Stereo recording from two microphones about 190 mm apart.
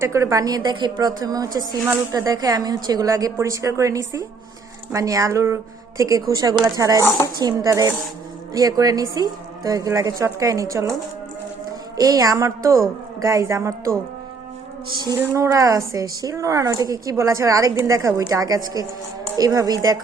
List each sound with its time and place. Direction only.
0.0 s speech: 15° right (ahead or behind)
11.9 s speech: 20° right (ahead or behind)
15.2 s speech: 15° right (ahead or behind)